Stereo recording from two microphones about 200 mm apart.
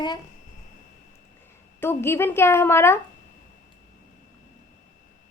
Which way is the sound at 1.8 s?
10° left (ahead or behind).